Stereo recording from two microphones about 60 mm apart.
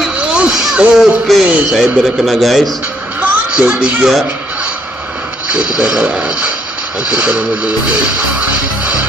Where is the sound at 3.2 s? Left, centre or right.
Right.